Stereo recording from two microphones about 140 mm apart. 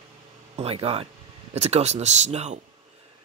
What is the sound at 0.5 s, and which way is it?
Speech, 45° right (ahead or behind).